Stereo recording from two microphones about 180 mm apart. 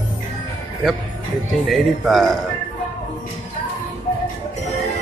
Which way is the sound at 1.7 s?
Centre (ahead or behind).